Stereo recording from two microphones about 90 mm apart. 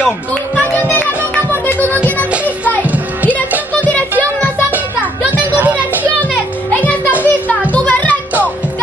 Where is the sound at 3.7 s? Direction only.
15° left (ahead or behind).